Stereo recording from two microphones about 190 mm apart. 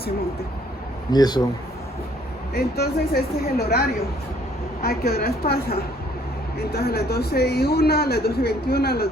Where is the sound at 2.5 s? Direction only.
55° left (ahead or behind).